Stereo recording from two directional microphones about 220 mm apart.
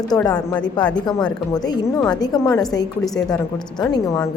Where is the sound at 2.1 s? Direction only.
15° left (ahead or behind).